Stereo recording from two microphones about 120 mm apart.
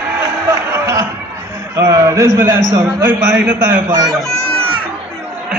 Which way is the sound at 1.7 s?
30° right (ahead or behind).